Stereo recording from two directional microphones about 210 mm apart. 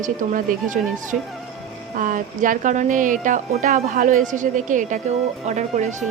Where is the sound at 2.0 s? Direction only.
40° right (ahead or behind).